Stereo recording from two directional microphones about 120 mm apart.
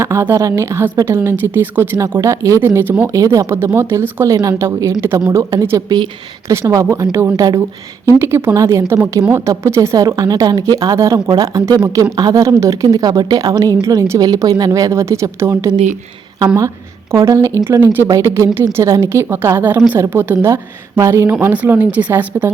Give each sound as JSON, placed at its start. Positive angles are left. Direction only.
{"t": 0.0, "sound": "a woman's voice", "side_deg": -20}
{"t": 17.2, "sound": "a woman's voice", "side_deg": -25}